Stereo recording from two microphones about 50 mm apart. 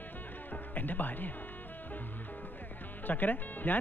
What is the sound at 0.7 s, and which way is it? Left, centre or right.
Speech, left.